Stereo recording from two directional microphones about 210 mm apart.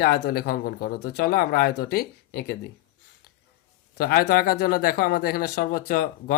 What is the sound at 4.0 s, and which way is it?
Speech, 45° left (ahead or behind).